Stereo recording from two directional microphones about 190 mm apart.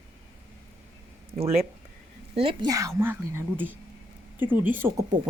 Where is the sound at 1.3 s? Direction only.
30° right (ahead or behind).